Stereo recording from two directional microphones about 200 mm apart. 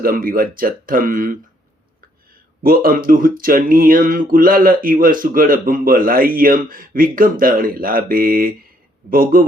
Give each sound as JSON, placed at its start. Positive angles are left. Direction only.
{"t": 0.0, "sound": "speech", "side_deg": -45}
{"t": 2.6, "sound": "speech", "side_deg": -45}